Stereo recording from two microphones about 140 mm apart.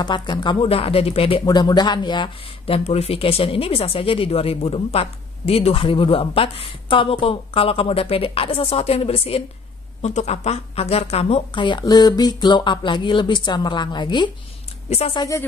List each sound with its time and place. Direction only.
0.0 s speech: 30° left (ahead or behind)
1.4 s a woman's voice: 30° left (ahead or behind); by 11.6 s 45° left (ahead or behind)
11.6 s speech: 30° left (ahead or behind)
14.9 s a woman's voice: 50° left (ahead or behind)
15.1 s speech: 25° left (ahead or behind)